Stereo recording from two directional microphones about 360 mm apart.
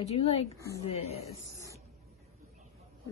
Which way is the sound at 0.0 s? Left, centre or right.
Centre.